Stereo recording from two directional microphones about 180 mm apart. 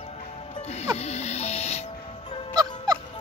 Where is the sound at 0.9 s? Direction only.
35° left (ahead or behind).